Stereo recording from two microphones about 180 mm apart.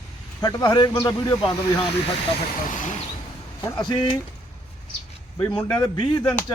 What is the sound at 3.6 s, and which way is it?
Speech, 25° left (ahead or behind).